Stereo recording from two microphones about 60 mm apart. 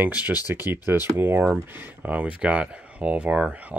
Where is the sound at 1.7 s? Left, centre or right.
Right.